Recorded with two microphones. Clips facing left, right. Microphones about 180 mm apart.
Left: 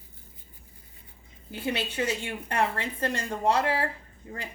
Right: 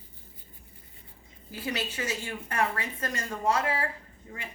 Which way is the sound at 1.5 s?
25° left (ahead or behind).